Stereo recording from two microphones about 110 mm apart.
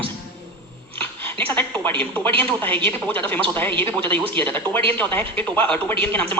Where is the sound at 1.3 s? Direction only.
15° left (ahead or behind).